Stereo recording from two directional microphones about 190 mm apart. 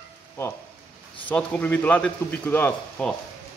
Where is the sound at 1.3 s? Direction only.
10° left (ahead or behind).